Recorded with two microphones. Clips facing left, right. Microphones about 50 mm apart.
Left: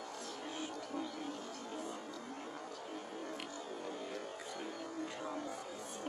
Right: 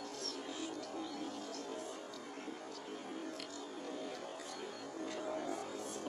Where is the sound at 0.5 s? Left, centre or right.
Left.